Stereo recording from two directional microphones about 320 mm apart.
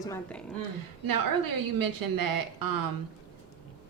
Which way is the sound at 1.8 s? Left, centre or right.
Right.